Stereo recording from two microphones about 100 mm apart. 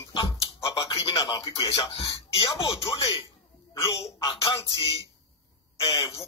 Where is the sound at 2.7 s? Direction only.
60° left (ahead or behind).